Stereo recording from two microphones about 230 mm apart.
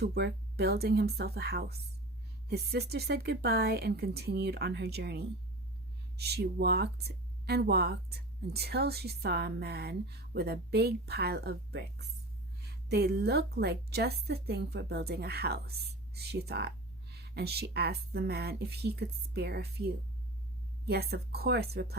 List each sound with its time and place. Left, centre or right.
0.0 s a woman's voice: right